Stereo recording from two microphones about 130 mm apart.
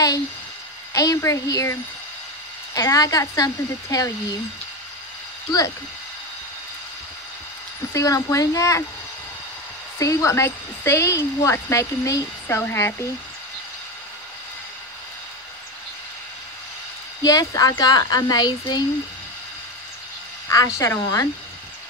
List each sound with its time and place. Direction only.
0.9 s a woman's voice: 25° left (ahead or behind)
7.9 s a woman's voice: 25° left (ahead or behind)
9.9 s a woman's voice: 25° left (ahead or behind)
17.2 s a woman's voice: 30° left (ahead or behind)
20.4 s a woman's voice: 25° left (ahead or behind)